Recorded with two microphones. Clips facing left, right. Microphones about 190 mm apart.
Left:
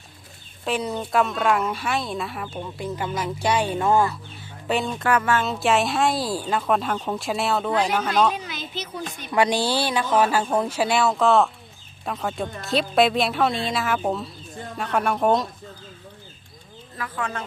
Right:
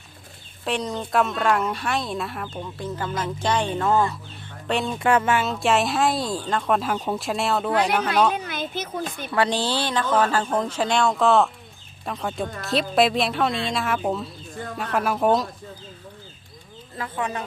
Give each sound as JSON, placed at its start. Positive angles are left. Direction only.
{"t": 0.6, "sound": "a woman's voice", "side_deg": 5}
{"t": 5.0, "sound": "speech", "side_deg": -25}
{"t": 5.4, "sound": "a woman's voice", "side_deg": 0}
{"t": 8.4, "sound": "a woman's voice", "side_deg": -55}
{"t": 9.3, "sound": "a woman's voice", "side_deg": 15}
{"t": 17.0, "sound": "speech", "side_deg": -20}